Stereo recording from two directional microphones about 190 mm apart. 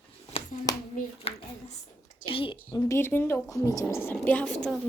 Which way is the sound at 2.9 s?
10° left (ahead or behind).